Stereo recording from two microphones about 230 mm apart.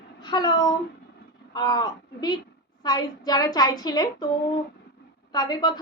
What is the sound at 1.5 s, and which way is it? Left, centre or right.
A woman's voice, centre.